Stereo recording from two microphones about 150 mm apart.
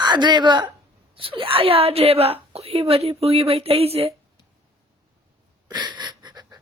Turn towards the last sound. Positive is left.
turn(degrees=-30)  # may be behind; listen again after turning